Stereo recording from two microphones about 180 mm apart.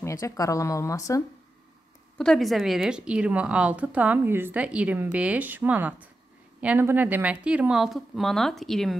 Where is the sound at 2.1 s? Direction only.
Centre (ahead or behind).